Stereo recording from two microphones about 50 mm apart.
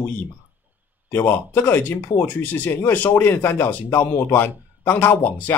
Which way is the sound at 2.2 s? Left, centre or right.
Left.